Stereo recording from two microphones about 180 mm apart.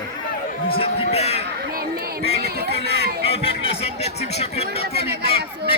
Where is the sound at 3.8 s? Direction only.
35° left (ahead or behind).